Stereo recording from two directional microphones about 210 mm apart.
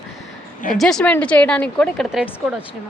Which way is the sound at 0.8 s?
Centre (ahead or behind).